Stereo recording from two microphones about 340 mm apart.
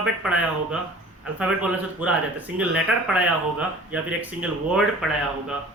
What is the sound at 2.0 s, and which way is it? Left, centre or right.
Speech, centre.